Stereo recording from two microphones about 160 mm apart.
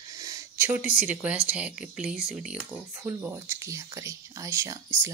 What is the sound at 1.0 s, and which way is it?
Speech, 10° right (ahead or behind).